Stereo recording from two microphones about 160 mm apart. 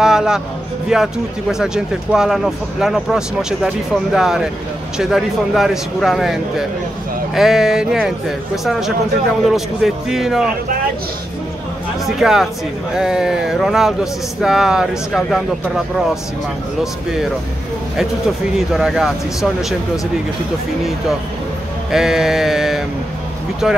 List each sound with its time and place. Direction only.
0.0 s a sound: 5° right (ahead or behind)
0.8 s speech: 5° right (ahead or behind)
12.2 s speech: centre (ahead or behind)
16.8 s speech: centre (ahead or behind)
18.7 s speech: centre (ahead or behind)
21.9 s speech: 5° right (ahead or behind)